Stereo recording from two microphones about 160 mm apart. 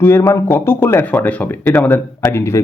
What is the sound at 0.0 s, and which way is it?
Speech, 15° left (ahead or behind).